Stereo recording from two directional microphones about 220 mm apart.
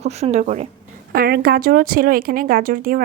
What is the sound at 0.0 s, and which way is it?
Speech, 30° right (ahead or behind).